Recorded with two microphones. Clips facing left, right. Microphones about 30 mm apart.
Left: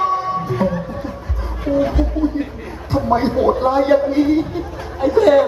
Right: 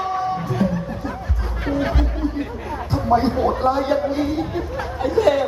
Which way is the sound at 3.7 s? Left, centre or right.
Centre.